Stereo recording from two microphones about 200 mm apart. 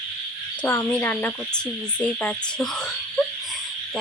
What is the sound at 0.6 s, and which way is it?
Speech, 10° left (ahead or behind).